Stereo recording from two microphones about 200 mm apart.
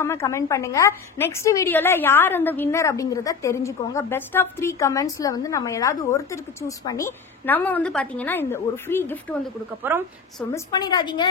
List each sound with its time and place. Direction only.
0.0 s a woman's voice: 15° left (ahead or behind)
9.9 s a woman's voice: 10° right (ahead or behind)
10.5 s a woman's voice: 20° left (ahead or behind)